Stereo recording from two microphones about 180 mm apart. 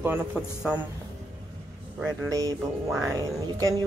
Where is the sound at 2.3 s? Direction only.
20° right (ahead or behind).